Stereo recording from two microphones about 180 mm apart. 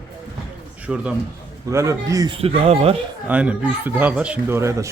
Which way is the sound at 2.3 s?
30° right (ahead or behind).